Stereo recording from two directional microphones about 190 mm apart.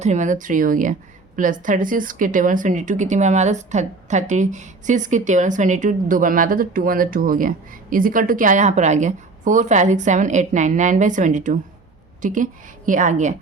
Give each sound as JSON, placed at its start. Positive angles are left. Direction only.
{"t": 0.0, "sound": "a woman's voice", "side_deg": -40}